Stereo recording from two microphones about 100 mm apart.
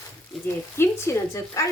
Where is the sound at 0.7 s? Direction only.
25° left (ahead or behind).